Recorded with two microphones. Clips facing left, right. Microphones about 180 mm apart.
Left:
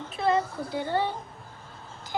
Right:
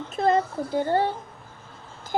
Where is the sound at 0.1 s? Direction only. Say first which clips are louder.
Right 3 dB; 45° right (ahead or behind).